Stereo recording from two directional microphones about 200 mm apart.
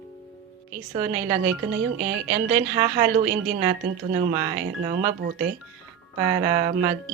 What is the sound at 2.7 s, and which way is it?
Speech, 25° right (ahead or behind).